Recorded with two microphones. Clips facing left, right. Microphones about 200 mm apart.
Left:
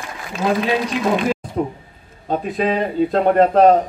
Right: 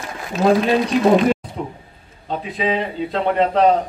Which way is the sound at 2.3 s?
45° left (ahead or behind).